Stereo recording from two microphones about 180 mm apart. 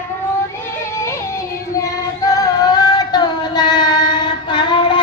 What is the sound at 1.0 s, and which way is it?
Music, 15° left (ahead or behind).